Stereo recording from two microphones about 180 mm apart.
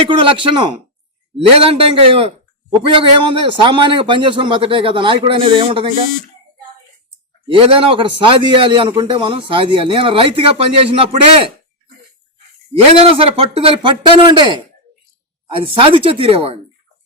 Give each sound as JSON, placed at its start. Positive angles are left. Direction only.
{"t": 0.0, "sound": "a man's voice", "side_deg": -30}
{"t": 1.8, "sound": "a man's voice", "side_deg": -30}
{"t": 7.4, "sound": "a man's voice", "side_deg": -30}
{"t": 13.0, "sound": "speech", "side_deg": -30}